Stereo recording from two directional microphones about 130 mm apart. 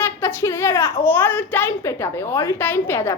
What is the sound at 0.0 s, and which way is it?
A child's voice, 20° left (ahead or behind).